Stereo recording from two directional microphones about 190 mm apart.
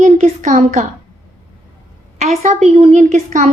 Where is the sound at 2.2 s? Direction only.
35° right (ahead or behind).